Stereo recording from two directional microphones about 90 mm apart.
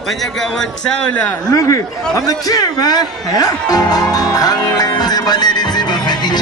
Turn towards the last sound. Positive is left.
turn(degrees=50)  # may be behind; listen again after turning